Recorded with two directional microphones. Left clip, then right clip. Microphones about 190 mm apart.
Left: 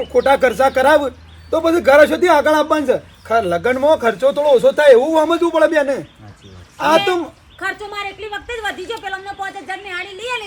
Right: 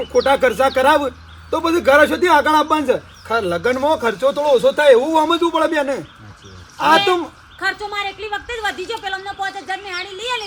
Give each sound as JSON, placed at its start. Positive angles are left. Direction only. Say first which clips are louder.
{"t": 0.0, "sound": "a man's voice", "louder": "left 1 dB", "side_deg": 0}